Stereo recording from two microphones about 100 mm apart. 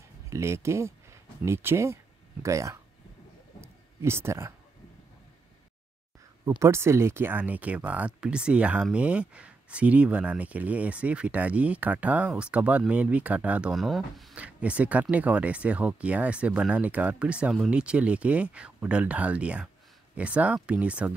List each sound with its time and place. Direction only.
0.3 s speech: 25° right (ahead or behind)
3.6 s a sound: 25° right (ahead or behind)
6.6 s speech: 30° right (ahead or behind); by 14.3 s centre (ahead or behind)
14.3 s speech: 15° right (ahead or behind)